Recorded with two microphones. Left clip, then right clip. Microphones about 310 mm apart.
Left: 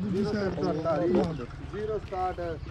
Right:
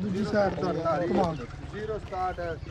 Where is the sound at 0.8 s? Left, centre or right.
Right.